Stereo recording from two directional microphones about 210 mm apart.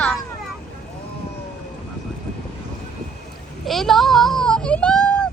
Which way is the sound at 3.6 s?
Centre (ahead or behind).